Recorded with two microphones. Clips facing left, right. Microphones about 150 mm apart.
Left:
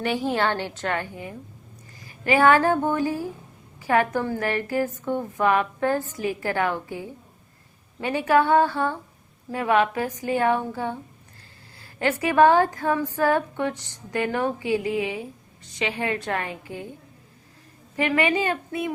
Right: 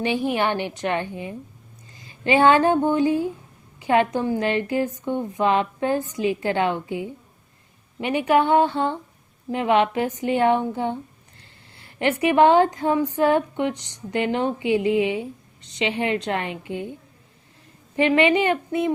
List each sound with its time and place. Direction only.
0.0 s a woman's voice: 15° right (ahead or behind)
17.9 s speech: 25° right (ahead or behind)